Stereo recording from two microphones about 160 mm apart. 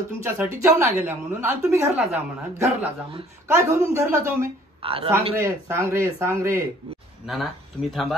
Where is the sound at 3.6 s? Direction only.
20° right (ahead or behind).